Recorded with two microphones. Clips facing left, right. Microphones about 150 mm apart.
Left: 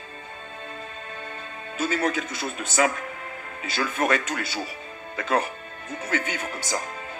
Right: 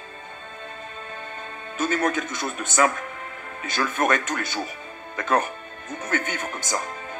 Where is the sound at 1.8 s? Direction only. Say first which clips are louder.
Right 2 dB; 50° right (ahead or behind).